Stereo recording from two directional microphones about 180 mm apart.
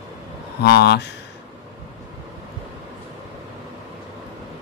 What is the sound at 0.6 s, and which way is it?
Speech, 65° left (ahead or behind).